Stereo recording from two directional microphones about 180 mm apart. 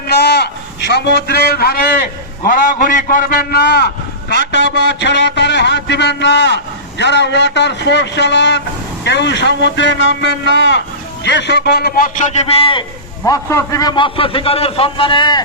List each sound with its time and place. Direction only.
0.1 s a sound: 70° left (ahead or behind)
2.4 s a man's voice: 50° left (ahead or behind); by 12.8 s 30° left (ahead or behind)
13.2 s a man's voice: 15° left (ahead or behind)